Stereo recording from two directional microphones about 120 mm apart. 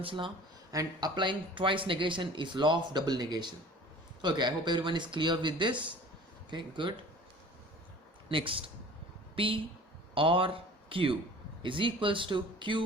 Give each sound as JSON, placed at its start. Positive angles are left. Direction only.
{"t": 0.0, "sound": "speech", "side_deg": -50}
{"t": 0.7, "sound": "speech", "side_deg": -30}
{"t": 8.3, "sound": "speech", "side_deg": -45}